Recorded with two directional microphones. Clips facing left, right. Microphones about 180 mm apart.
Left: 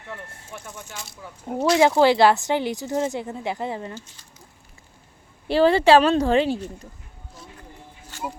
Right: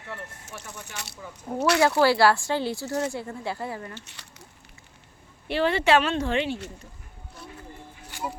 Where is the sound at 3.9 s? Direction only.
70° right (ahead or behind).